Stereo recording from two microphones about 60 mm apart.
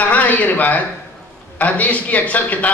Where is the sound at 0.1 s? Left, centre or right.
Left.